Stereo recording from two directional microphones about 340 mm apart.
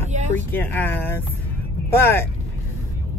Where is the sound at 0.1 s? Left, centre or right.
Right.